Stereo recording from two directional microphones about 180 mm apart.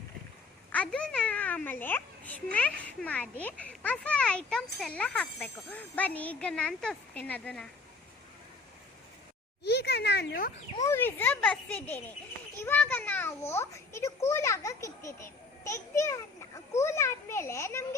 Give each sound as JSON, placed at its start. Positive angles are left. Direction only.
{"t": 0.7, "sound": "a child's voice", "side_deg": 5}
{"t": 9.6, "sound": "speech", "side_deg": 65}
{"t": 10.8, "sound": "a child's voice", "side_deg": 10}